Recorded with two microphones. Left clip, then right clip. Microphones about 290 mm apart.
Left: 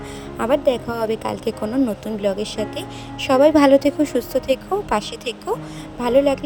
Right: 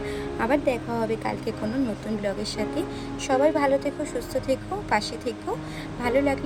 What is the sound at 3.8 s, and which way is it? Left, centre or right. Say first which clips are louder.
A woman's voice: left 9 dB; left.